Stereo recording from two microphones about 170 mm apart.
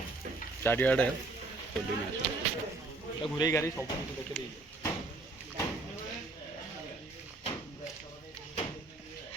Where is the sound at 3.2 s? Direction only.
25° left (ahead or behind).